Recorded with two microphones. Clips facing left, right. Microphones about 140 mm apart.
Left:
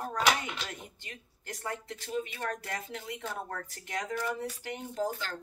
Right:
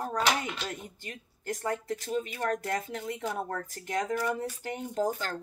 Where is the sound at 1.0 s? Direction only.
45° right (ahead or behind).